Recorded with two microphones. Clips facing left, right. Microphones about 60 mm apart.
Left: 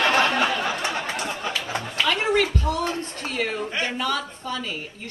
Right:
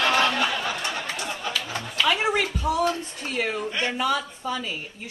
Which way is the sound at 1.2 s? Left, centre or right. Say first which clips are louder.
Left 2 dB; left.